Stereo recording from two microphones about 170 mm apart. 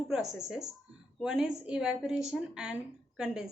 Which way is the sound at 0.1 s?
5° right (ahead or behind).